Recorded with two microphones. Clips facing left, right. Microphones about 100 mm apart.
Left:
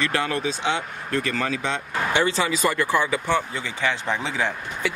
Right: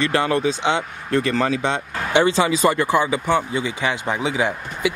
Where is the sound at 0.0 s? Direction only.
30° right (ahead or behind).